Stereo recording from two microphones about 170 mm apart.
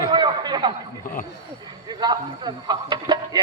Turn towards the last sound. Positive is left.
turn(degrees=-25)  # may be behind; listen again after turning